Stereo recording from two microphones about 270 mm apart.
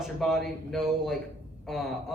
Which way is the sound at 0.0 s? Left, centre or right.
Centre.